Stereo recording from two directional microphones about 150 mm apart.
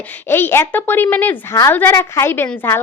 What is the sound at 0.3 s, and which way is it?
A woman's voice, 15° left (ahead or behind).